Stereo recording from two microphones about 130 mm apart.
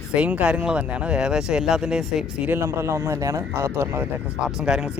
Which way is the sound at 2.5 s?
20° right (ahead or behind).